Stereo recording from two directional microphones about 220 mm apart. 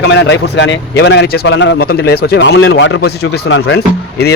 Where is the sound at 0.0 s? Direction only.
55° left (ahead or behind).